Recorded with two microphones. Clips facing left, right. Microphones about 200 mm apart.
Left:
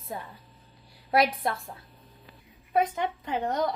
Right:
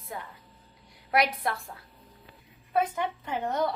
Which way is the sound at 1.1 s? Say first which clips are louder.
Left 2 dB; 25° left (ahead or behind).